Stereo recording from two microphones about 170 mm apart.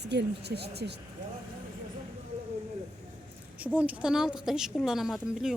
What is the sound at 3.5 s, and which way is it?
A woman's voice, 10° right (ahead or behind).